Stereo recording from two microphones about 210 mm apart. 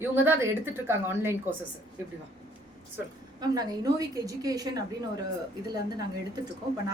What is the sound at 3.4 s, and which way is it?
A woman's voice, 20° right (ahead or behind).